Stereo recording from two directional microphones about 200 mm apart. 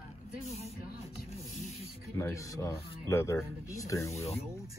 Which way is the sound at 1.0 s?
35° left (ahead or behind).